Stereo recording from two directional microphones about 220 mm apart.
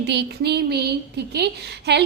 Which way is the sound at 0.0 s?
50° right (ahead or behind).